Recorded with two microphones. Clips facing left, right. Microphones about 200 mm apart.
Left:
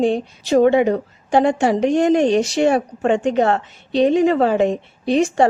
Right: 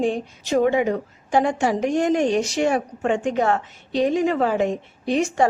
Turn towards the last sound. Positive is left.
turn(degrees=30)  # may be behind; listen again after turning